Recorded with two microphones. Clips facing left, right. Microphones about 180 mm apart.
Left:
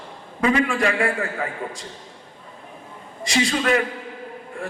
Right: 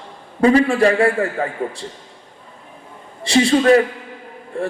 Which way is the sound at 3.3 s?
30° right (ahead or behind).